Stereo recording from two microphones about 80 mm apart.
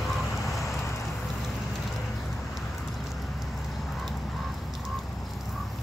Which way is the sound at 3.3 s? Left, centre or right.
Centre.